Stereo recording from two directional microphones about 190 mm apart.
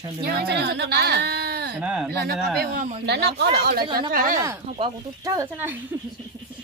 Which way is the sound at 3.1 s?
60° right (ahead or behind).